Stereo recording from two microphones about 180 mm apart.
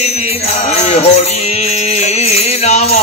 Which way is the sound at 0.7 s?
40° left (ahead or behind).